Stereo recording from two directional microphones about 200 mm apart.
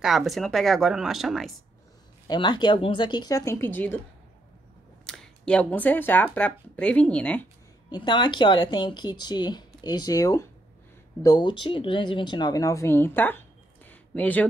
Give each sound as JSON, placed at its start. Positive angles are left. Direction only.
{"t": 0.0, "sound": "speech", "side_deg": 0}
{"t": 2.2, "sound": "speech", "side_deg": 20}
{"t": 5.0, "sound": "speech", "side_deg": 5}
{"t": 7.9, "sound": "speech", "side_deg": 20}